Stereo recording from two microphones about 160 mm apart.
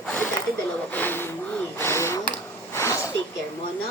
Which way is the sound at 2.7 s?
20° left (ahead or behind).